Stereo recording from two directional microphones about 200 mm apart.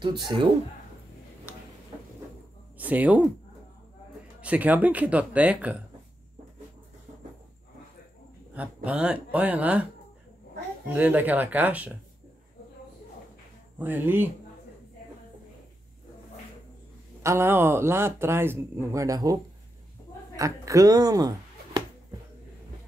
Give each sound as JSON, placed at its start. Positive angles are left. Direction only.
{"t": 0.0, "sound": "speech", "side_deg": -20}
{"t": 2.8, "sound": "speech", "side_deg": -10}
{"t": 4.4, "sound": "speech", "side_deg": -5}
{"t": 8.5, "sound": "speech", "side_deg": -5}
{"t": 10.9, "sound": "speech", "side_deg": -10}
{"t": 13.7, "sound": "speech", "side_deg": -10}
{"t": 17.2, "sound": "speech", "side_deg": -15}
{"t": 20.3, "sound": "speech", "side_deg": -15}